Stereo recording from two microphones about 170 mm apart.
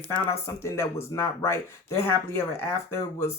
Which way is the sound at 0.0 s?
10° left (ahead or behind).